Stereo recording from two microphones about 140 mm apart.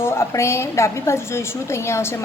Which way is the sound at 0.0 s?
20° left (ahead or behind).